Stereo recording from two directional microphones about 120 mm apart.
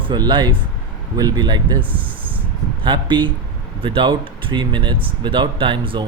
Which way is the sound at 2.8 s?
40° right (ahead or behind).